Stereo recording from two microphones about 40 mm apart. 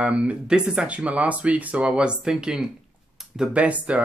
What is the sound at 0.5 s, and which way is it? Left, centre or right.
Speech, centre.